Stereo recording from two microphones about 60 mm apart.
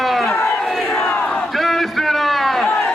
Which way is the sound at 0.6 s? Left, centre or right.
Centre.